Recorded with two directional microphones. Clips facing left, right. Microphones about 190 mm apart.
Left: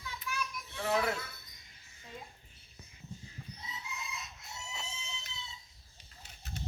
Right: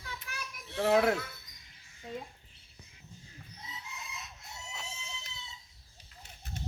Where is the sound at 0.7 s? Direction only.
55° right (ahead or behind).